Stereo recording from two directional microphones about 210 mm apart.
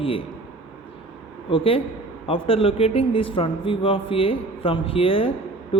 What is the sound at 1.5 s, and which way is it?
A man's voice, 25° left (ahead or behind).